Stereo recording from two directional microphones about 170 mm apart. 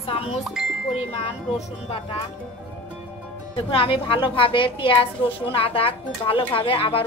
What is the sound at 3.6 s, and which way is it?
A woman's voice, 35° left (ahead or behind).